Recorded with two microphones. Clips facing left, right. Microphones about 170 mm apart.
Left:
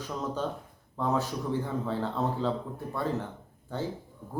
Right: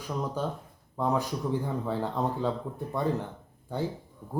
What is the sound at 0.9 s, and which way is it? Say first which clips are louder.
Speech: right 1 dB; 15° right (ahead or behind).